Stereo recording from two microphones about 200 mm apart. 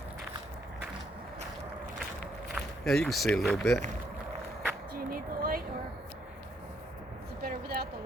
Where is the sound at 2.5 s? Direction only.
Centre (ahead or behind).